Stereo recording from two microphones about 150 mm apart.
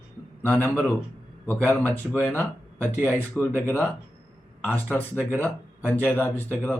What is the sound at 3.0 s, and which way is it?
Speech, 10° left (ahead or behind).